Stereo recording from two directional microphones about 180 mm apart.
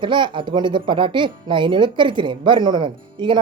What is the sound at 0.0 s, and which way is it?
Speech, 25° right (ahead or behind).